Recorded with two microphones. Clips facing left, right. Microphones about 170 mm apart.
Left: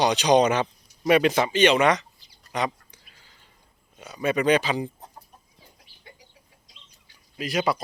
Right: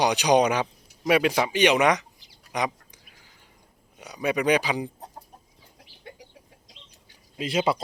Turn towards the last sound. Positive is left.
turn(degrees=-25)  # may be behind; listen again after turning